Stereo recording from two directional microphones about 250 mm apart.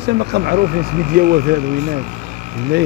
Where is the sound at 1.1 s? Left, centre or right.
Right.